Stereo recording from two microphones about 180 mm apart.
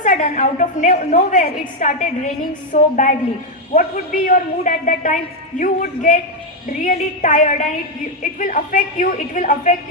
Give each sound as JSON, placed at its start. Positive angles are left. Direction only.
{"t": 0.0, "sound": "a woman's voice", "side_deg": 45}